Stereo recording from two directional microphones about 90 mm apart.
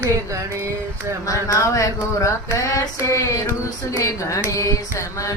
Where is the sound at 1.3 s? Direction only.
35° left (ahead or behind).